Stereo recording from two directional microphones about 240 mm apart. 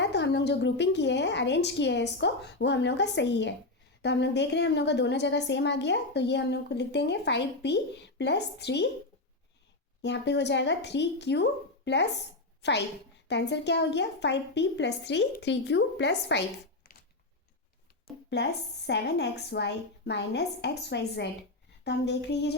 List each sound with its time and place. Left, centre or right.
0.0 s a woman's voice: left
10.0 s a woman's voice: left
16.8 s a sound: left
18.9 s a woman's voice: left